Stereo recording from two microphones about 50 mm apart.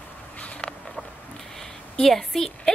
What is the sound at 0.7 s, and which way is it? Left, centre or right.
Patter, centre.